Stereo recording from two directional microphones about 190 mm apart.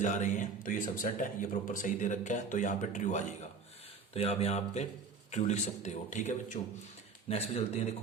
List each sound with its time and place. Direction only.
0.0 s speech: 40° left (ahead or behind)